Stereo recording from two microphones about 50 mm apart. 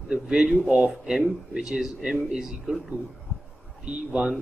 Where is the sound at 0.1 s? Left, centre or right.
Centre.